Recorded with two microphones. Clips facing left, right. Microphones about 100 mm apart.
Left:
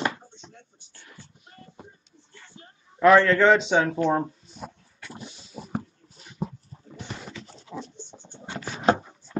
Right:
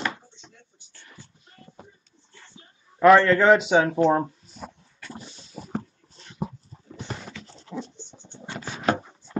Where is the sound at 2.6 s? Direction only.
55° left (ahead or behind).